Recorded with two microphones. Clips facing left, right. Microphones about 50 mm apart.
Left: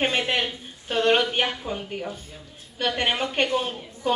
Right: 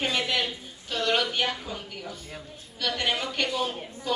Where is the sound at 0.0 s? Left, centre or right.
Left.